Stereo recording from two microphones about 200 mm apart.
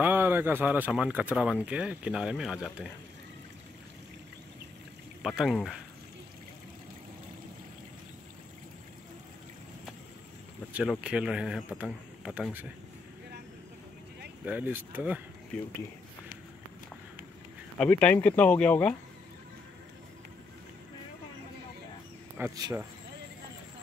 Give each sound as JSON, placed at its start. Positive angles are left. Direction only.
{"t": 0.0, "sound": "speech", "side_deg": -10}
{"t": 5.2, "sound": "speech", "side_deg": 0}
{"t": 10.7, "sound": "speech", "side_deg": -5}
{"t": 14.4, "sound": "speech", "side_deg": -10}
{"t": 15.5, "sound": "speech", "side_deg": 5}
{"t": 17.7, "sound": "speech", "side_deg": 5}
{"t": 22.4, "sound": "speech", "side_deg": -15}